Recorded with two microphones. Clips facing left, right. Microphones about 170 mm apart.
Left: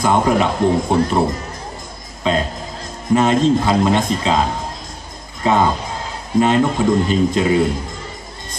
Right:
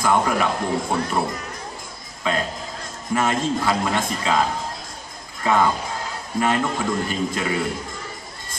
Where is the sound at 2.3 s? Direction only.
25° left (ahead or behind).